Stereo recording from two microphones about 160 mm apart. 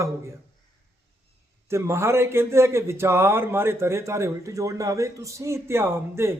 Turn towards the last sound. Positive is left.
turn(degrees=-15)  # may be behind; listen again after turning